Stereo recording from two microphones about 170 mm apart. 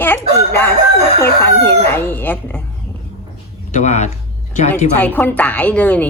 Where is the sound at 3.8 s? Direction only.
45° left (ahead or behind).